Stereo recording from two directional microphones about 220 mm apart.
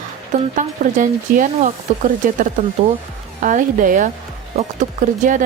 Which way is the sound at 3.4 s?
35° right (ahead or behind).